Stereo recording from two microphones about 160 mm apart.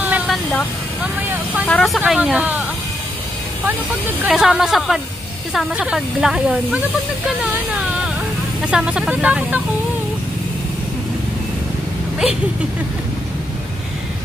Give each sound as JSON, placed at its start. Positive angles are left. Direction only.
{"t": 0.0, "sound": "vehicle", "side_deg": -10}
{"t": 1.0, "sound": "speech", "side_deg": -10}
{"t": 4.3, "sound": "speech", "side_deg": -5}
{"t": 8.6, "sound": "speech", "side_deg": -5}